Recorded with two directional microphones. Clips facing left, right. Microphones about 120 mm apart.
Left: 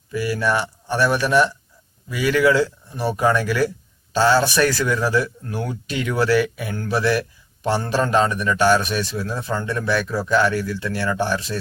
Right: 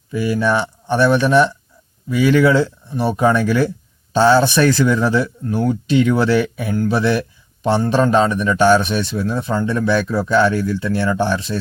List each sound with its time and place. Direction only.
0.1 s a man's voice: 20° right (ahead or behind)